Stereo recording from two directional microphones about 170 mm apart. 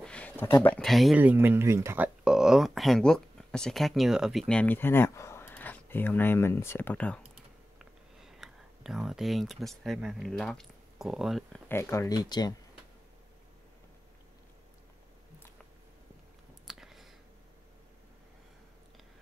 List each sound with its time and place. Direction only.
0.0 s speech: 10° left (ahead or behind)
1.2 s speech: 10° right (ahead or behind)
2.2 s speech: 5° right (ahead or behind)
7.8 s speech: centre (ahead or behind)
11.7 s speech: 15° left (ahead or behind)
16.6 s a sound: centre (ahead or behind)